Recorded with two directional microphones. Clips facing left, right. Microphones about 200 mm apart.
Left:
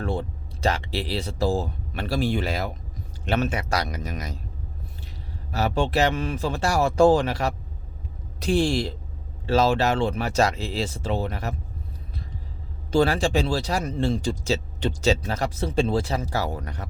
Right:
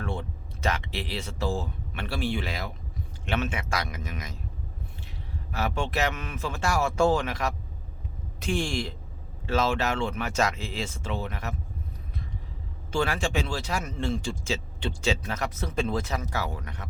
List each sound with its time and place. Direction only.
0.0 s speech: 35° left (ahead or behind)
5.5 s speech: 35° left (ahead or behind)
12.9 s speech: 35° left (ahead or behind)